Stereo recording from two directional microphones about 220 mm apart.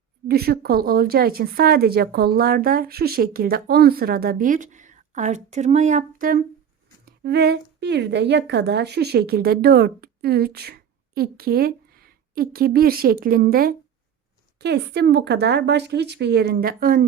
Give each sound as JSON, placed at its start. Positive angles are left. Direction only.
{"t": 0.3, "sound": "a woman's voice", "side_deg": -45}